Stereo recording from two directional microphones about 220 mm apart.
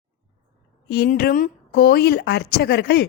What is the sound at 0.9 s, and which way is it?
A woman's voice, 45° left (ahead or behind).